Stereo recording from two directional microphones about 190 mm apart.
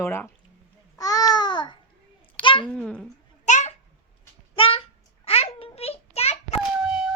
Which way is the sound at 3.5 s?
40° left (ahead or behind).